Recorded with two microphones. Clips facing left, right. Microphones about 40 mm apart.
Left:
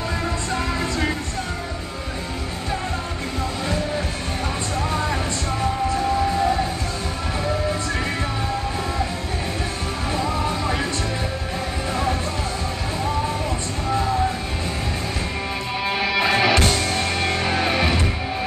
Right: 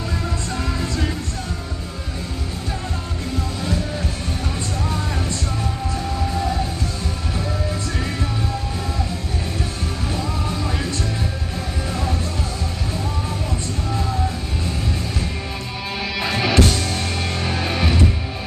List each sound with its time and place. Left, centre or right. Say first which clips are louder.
0.7 s music: left 2 dB; centre
5.6 s music: left 4 dB; centre
10.1 s music: left 4 dB; centre
11.9 s music: left 3 dB; centre
16.0 s music: left 3 dB; centre